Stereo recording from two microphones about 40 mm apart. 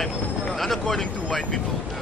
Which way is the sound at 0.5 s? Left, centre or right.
Centre.